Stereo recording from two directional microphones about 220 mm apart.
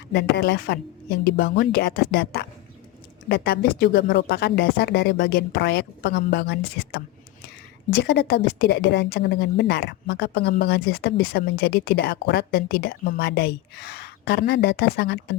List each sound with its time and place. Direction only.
0.1 s a woman's voice: 50° left (ahead or behind)